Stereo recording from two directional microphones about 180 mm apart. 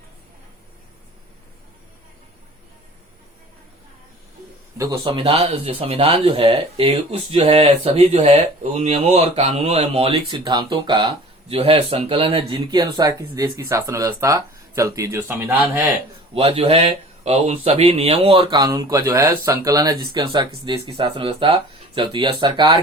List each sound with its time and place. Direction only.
5.0 s speech: 30° right (ahead or behind); by 15.8 s 10° right (ahead or behind)
16.3 s speech: 30° right (ahead or behind)